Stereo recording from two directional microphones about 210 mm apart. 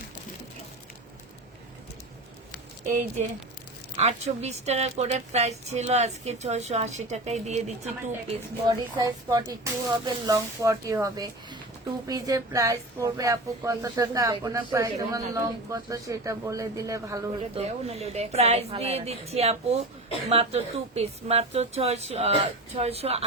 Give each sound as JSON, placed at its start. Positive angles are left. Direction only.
{"t": 2.8, "sound": "a woman's voice", "side_deg": -35}
{"t": 9.0, "sound": "a woman's voice", "side_deg": -20}
{"t": 17.6, "sound": "speech", "side_deg": -30}